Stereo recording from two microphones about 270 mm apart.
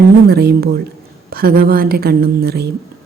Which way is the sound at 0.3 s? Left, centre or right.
Right.